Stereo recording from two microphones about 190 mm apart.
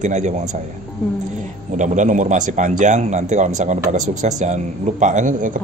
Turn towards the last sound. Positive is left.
turn(degrees=-40)  # may be behind; listen again after turning